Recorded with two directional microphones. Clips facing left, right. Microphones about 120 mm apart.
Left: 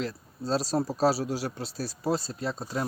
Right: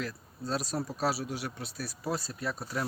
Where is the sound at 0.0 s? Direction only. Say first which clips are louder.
Left 4 dB; 30° left (ahead or behind).